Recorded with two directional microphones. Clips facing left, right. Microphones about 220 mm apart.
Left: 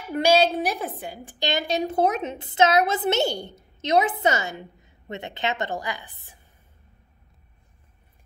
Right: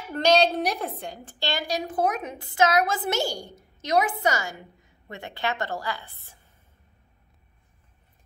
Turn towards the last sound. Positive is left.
turn(degrees=15)  # may be behind; listen again after turning